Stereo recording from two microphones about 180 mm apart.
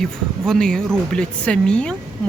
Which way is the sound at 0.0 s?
Centre (ahead or behind).